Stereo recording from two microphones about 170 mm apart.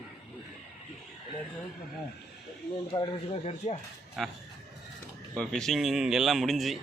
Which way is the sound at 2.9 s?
25° left (ahead or behind).